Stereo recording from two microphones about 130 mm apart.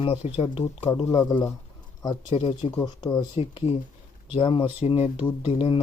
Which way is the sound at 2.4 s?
45° left (ahead or behind).